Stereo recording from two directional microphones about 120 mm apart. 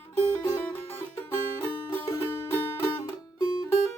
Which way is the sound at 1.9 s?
25° left (ahead or behind).